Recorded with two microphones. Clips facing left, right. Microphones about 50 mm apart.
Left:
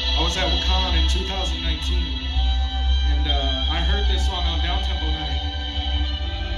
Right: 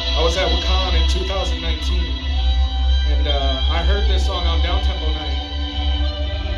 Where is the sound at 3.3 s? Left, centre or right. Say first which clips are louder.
Right 3 dB; left.